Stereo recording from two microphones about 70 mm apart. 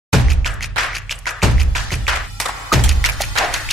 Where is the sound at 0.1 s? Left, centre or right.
Centre.